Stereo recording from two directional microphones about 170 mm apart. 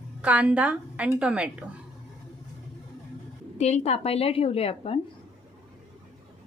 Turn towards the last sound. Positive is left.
turn(degrees=35)  # may be behind; listen again after turning